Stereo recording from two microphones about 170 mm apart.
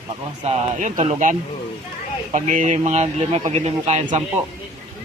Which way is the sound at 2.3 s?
45° right (ahead or behind).